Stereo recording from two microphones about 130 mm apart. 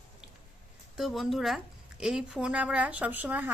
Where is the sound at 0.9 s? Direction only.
Centre (ahead or behind).